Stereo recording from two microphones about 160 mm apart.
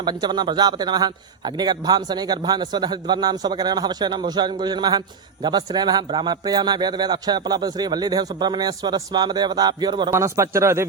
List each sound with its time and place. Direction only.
0.0 s a man's voice: 25° right (ahead or behind)